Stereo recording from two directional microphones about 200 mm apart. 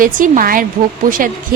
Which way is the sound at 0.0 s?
45° right (ahead or behind).